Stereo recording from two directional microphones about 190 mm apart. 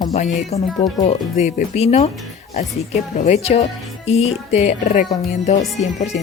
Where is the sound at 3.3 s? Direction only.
35° left (ahead or behind).